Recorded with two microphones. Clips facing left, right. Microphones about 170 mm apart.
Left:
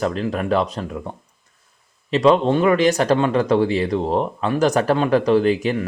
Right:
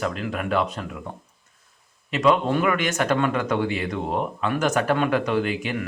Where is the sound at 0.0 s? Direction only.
35° left (ahead or behind).